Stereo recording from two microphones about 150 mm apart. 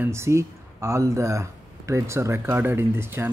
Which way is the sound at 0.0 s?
15° right (ahead or behind).